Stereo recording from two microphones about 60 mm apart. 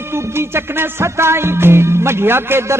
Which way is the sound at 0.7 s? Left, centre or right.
Right.